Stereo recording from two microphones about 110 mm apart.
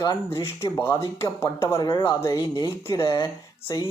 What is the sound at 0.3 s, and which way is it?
Speech, 30° left (ahead or behind).